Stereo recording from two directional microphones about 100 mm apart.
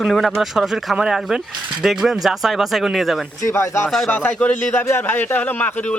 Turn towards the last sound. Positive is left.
turn(degrees=15)  # may be behind; listen again after turning